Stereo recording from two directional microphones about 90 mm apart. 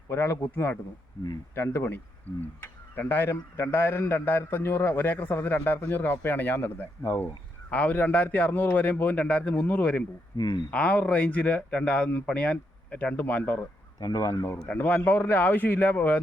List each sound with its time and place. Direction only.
0.1 s a man's voice: 25° left (ahead or behind)
10.3 s speech: 55° left (ahead or behind)
10.7 s speech: 15° left (ahead or behind)
13.6 s speech: 45° left (ahead or behind)
14.7 s a man's voice: 20° left (ahead or behind)